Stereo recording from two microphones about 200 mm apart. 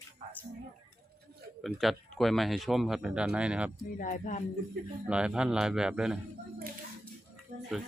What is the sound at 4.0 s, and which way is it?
Music, 40° left (ahead or behind).